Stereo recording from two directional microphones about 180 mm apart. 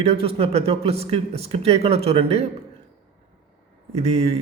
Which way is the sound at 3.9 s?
35° right (ahead or behind).